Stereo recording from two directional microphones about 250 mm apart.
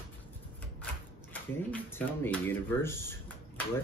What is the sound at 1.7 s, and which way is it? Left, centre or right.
Speech, centre.